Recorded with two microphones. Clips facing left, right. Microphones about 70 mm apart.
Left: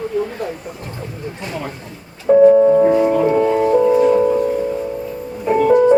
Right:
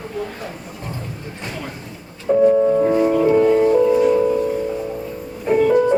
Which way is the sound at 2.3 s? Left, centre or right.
Left.